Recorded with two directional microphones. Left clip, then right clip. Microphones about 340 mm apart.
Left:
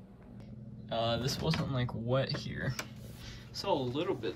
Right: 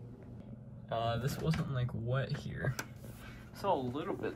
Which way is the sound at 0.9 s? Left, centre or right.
Centre.